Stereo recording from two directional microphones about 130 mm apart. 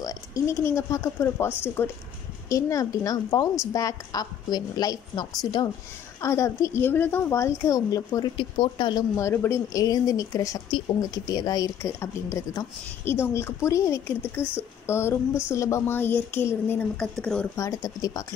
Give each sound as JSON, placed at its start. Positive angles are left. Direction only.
{"t": 0.0, "sound": "speech", "side_deg": 25}
{"t": 6.2, "sound": "speech", "side_deg": 25}
{"t": 8.4, "sound": "speech", "side_deg": 40}
{"t": 9.1, "sound": "speech", "side_deg": 20}
{"t": 16.9, "sound": "speech", "side_deg": 5}
{"t": 17.6, "sound": "speech", "side_deg": 25}